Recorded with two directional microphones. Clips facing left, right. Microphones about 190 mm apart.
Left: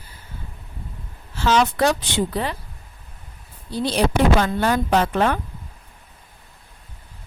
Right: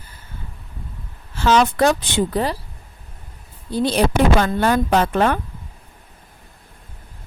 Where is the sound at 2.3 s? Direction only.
40° right (ahead or behind).